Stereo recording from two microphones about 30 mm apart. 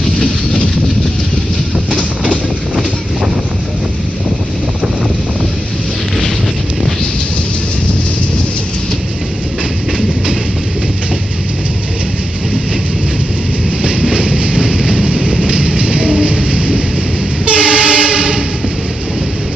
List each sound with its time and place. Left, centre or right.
14.1 s train: right